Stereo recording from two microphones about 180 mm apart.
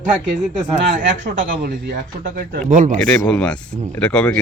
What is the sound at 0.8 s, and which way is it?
Speech, 45° right (ahead or behind).